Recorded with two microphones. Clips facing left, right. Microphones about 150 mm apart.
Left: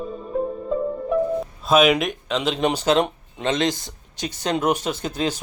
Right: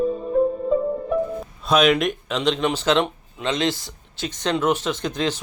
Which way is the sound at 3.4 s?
45° left (ahead or behind).